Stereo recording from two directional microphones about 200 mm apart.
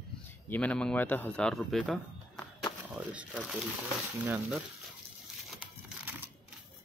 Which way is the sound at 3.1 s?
Centre (ahead or behind).